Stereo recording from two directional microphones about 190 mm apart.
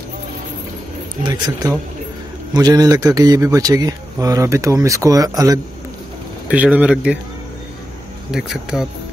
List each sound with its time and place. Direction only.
1.2 s a man's voice: 20° right (ahead or behind)
6.5 s speech: 5° right (ahead or behind)
8.3 s speech: 5° right (ahead or behind)